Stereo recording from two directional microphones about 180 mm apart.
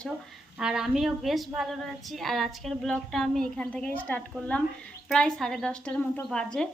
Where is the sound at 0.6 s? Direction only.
5° right (ahead or behind).